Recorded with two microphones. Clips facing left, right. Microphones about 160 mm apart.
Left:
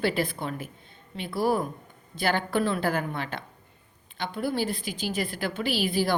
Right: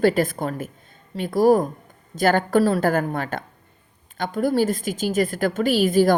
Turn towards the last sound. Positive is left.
turn(degrees=-45)  # may be behind; listen again after turning